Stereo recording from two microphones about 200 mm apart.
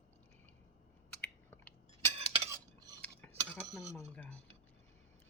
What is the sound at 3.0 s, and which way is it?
Cutlery, 5° left (ahead or behind).